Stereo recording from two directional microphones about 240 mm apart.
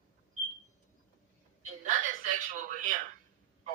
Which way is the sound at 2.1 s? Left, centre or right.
Right.